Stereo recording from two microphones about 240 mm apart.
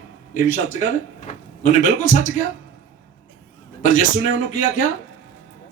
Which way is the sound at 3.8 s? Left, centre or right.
Left.